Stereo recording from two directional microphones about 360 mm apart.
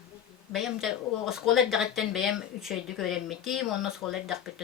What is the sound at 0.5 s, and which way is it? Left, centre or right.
Speech, centre.